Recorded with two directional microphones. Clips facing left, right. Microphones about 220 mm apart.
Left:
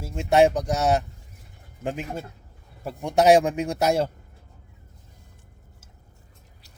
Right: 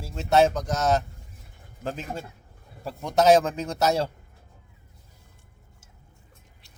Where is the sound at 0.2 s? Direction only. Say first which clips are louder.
Left 2 dB; 15° left (ahead or behind).